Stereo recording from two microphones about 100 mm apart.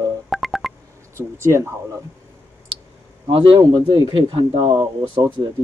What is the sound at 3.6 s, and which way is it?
Speech, 40° right (ahead or behind).